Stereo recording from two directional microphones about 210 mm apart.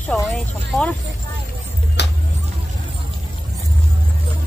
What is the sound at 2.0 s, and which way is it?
Music, 55° left (ahead or behind).